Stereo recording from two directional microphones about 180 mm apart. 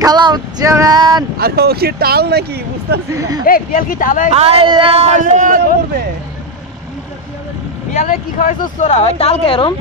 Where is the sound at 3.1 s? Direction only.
20° right (ahead or behind).